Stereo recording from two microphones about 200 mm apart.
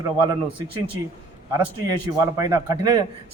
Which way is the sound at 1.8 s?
20° right (ahead or behind).